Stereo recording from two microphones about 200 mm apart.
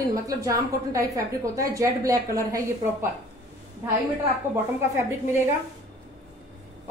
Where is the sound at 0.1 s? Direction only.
15° right (ahead or behind).